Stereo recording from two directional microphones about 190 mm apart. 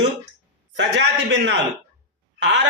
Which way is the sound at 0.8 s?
65° right (ahead or behind).